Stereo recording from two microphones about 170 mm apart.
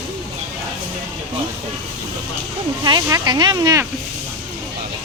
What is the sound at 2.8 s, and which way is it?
Speech, 25° right (ahead or behind).